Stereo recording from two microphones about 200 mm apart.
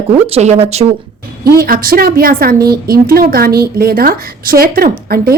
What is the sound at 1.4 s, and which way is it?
A woman's voice, 50° right (ahead or behind).